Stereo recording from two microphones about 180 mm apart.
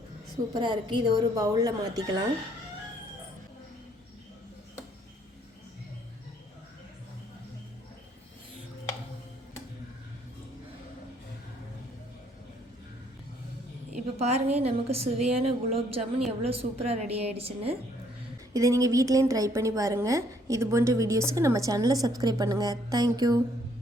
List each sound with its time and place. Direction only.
0.5 s speech: 25° right (ahead or behind)
14.2 s a woman's voice: 35° right (ahead or behind)
18.5 s a woman's voice: 20° right (ahead or behind)